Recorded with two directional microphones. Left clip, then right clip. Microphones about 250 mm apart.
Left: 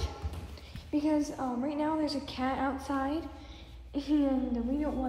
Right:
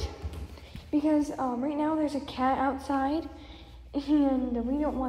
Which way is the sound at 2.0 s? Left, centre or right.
Centre.